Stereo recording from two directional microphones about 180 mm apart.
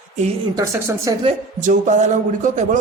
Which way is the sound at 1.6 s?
45° right (ahead or behind).